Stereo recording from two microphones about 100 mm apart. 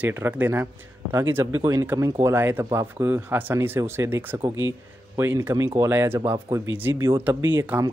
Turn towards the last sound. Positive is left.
turn(degrees=-20)  # may be behind; listen again after turning